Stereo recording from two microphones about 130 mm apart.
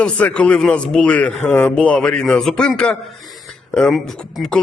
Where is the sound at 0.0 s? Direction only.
10° left (ahead or behind).